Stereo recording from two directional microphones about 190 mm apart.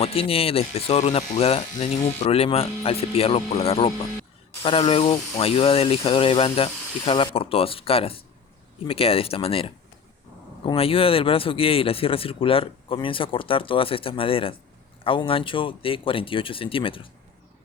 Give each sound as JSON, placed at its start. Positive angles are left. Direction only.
{"t": 0.0, "sound": "a man's voice", "side_deg": 30}